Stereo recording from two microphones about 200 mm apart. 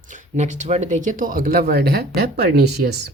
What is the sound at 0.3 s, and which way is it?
Speech, 35° right (ahead or behind).